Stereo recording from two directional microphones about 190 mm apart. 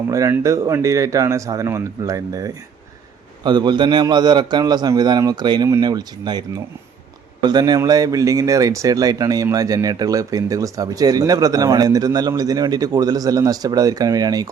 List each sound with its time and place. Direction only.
0.1 s a man's voice: 15° right (ahead or behind)
7.4 s speech: 20° right (ahead or behind)